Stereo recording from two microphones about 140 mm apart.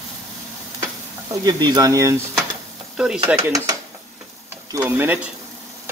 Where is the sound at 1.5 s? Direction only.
30° right (ahead or behind).